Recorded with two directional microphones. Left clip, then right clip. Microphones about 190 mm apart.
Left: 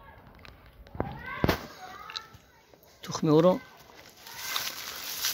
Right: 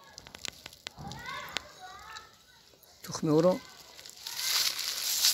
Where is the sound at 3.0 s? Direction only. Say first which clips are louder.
Left 4 dB; centre (ahead or behind).